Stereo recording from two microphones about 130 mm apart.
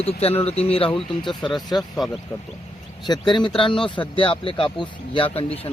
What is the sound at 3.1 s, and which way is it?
Speech, 35° left (ahead or behind).